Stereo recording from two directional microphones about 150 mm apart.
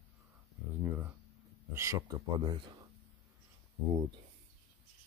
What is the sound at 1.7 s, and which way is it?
Speech, 20° right (ahead or behind).